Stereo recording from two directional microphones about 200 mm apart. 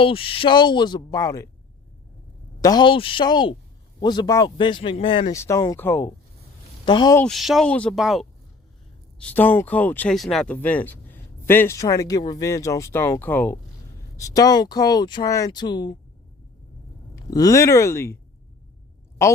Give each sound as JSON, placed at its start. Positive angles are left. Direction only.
{"t": 0.0, "sound": "speech", "side_deg": 25}
{"t": 2.6, "sound": "speech", "side_deg": 20}
{"t": 5.3, "sound": "speech", "side_deg": 15}
{"t": 7.2, "sound": "speech", "side_deg": 0}
{"t": 17.3, "sound": "speech", "side_deg": 15}